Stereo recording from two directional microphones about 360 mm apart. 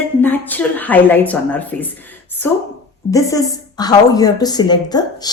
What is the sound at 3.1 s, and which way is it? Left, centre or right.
A woman's voice, centre.